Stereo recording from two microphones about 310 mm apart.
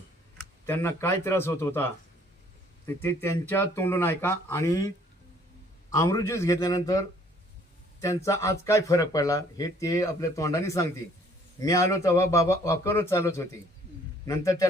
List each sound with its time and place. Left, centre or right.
0.6 s speech: centre
5.9 s speech: centre
8.0 s speech: centre